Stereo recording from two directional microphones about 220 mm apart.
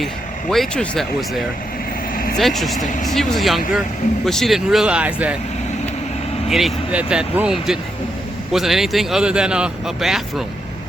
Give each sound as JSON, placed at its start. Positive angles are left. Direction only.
{"t": 0.5, "sound": "a man's voice", "side_deg": 5}
{"t": 2.8, "sound": "speech", "side_deg": 35}
{"t": 3.1, "sound": "a man's voice", "side_deg": 0}
{"t": 6.5, "sound": "a man's voice", "side_deg": 0}